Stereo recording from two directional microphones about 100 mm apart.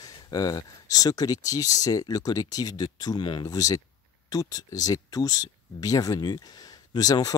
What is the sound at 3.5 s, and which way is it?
Speech, 35° left (ahead or behind).